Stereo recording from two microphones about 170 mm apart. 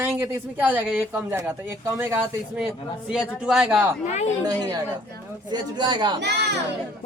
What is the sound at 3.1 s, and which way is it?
Speech, 5° right (ahead or behind).